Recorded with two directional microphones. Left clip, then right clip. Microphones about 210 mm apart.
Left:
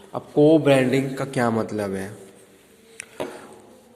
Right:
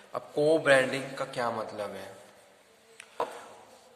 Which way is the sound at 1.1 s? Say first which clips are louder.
Left 8 dB; 25° left (ahead or behind).